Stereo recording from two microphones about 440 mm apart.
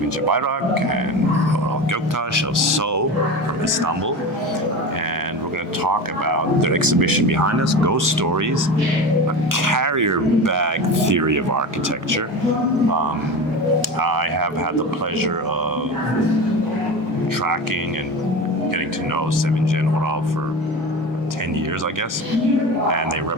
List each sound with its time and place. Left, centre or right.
0.3 s speech: right
5.8 s speech: right
9.6 s speech: right
14.0 s speech: right